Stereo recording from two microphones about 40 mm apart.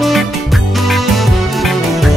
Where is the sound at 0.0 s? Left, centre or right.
Centre.